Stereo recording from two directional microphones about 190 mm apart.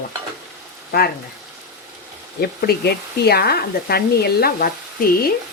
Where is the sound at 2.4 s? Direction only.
55° left (ahead or behind).